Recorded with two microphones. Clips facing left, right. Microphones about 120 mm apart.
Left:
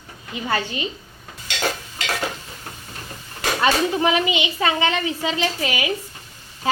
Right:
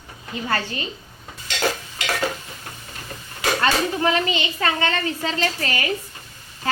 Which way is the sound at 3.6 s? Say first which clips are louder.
Left 3 dB; 15° left (ahead or behind).